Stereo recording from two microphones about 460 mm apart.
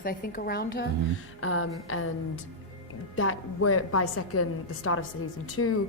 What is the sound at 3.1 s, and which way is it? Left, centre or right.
A woman's voice, left.